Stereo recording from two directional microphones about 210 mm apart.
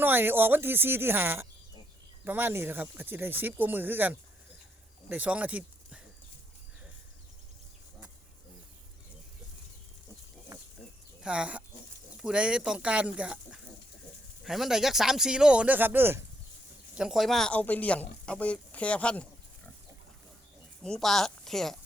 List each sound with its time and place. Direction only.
0.0 s speech: 10° right (ahead or behind)
10.5 s pig: 15° right (ahead or behind)
11.2 s speech: 5° right (ahead or behind)
20.8 s speech: centre (ahead or behind)